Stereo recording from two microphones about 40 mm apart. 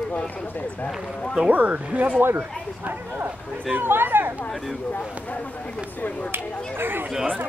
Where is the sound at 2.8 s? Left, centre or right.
Right.